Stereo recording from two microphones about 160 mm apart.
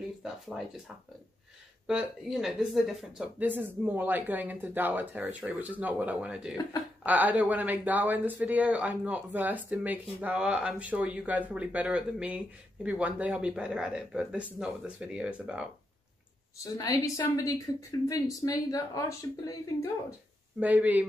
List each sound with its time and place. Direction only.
0.2 s a sound: centre (ahead or behind)
1.9 s speech: 5° right (ahead or behind)
16.7 s a woman's voice: 25° left (ahead or behind)
20.5 s speech: 10° right (ahead or behind)